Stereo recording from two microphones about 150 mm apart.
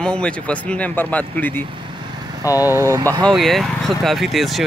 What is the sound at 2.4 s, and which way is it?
Speech, 20° left (ahead or behind).